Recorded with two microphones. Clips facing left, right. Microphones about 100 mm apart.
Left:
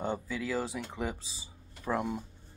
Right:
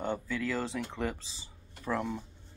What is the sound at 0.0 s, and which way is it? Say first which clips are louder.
Speech: right 1 dB; 10° left (ahead or behind).